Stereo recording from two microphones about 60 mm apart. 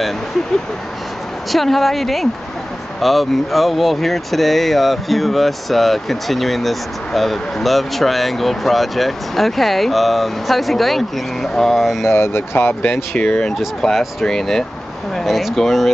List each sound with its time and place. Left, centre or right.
1.5 s speech: centre
12.1 s speech: left
12.8 s speech: left
13.8 s speech: centre